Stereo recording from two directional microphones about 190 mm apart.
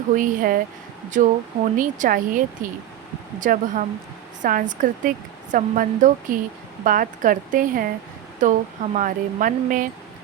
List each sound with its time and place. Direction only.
0.2 s speech: 45° right (ahead or behind)